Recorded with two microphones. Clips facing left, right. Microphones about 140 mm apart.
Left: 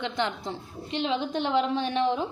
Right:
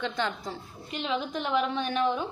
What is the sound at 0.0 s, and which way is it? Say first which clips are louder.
A woman's voice: left 1 dB; 20° left (ahead or behind).